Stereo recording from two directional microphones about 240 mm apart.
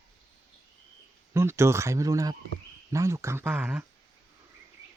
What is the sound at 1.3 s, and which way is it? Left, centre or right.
Speech, centre.